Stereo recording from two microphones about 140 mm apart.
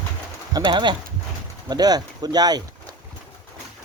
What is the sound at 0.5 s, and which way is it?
Speech, 35° right (ahead or behind).